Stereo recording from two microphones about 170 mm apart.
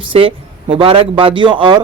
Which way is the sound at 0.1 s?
30° right (ahead or behind).